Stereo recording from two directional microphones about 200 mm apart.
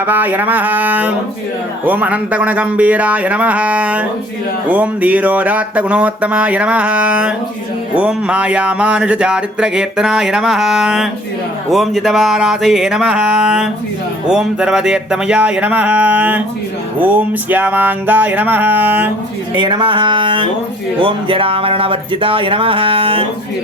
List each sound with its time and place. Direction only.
0.0 s speech: 10° right (ahead or behind)
19.5 s speech: 20° right (ahead or behind)